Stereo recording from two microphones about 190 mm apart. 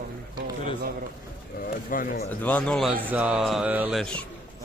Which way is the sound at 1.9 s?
45° left (ahead or behind).